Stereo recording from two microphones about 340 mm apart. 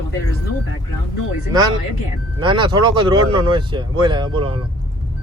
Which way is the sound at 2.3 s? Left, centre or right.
Centre.